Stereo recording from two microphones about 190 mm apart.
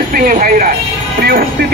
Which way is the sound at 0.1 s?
45° right (ahead or behind).